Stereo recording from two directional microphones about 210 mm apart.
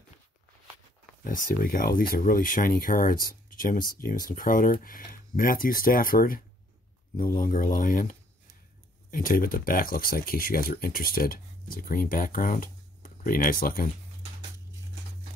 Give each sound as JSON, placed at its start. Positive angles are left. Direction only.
{"t": 1.2, "sound": "speech", "side_deg": 40}